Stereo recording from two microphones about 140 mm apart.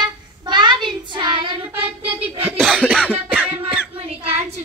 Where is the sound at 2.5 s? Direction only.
5° left (ahead or behind).